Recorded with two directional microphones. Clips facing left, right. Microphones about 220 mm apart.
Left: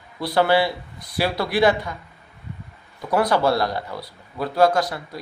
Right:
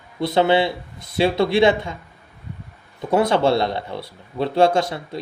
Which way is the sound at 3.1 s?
25° right (ahead or behind).